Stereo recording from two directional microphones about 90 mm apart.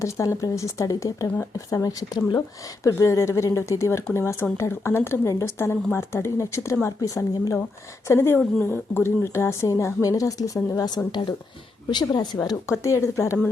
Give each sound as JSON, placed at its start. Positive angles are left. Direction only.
{"t": 0.0, "sound": "a woman's voice", "side_deg": 35}